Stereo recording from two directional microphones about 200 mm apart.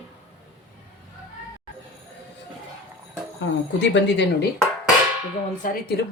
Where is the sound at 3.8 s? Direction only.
60° left (ahead or behind).